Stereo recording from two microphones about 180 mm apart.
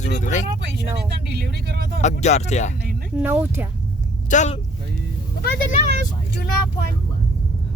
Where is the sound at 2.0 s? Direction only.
40° left (ahead or behind).